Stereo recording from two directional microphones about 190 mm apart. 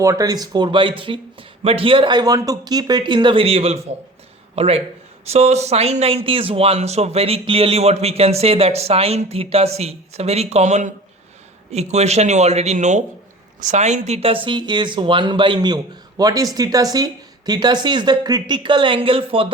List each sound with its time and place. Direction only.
0.0 s speech: 15° right (ahead or behind)